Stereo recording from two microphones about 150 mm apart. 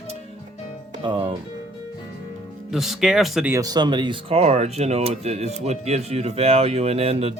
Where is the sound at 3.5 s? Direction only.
25° right (ahead or behind).